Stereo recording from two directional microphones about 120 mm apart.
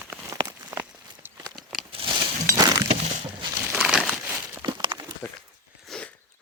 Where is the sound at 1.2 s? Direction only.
15° right (ahead or behind).